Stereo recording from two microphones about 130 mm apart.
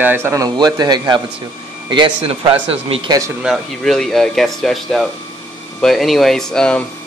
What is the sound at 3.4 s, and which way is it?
Speech, centre (ahead or behind).